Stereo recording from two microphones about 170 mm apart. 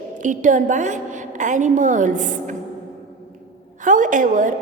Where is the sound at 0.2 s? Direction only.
50° right (ahead or behind).